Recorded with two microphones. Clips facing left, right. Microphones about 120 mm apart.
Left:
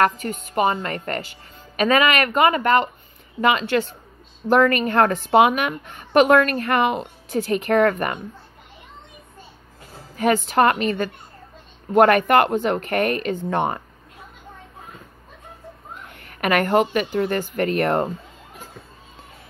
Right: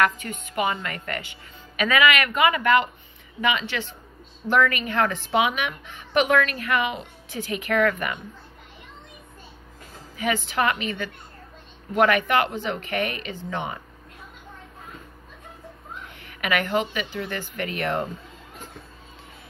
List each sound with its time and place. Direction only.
0.0 s a woman's voice: 40° left (ahead or behind)
10.1 s a woman's voice: 45° left (ahead or behind)
16.2 s a woman's voice: 45° left (ahead or behind)